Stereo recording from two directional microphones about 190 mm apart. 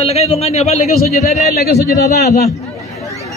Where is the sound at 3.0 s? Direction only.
15° left (ahead or behind).